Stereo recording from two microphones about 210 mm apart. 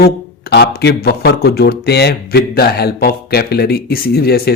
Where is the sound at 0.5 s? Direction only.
50° left (ahead or behind).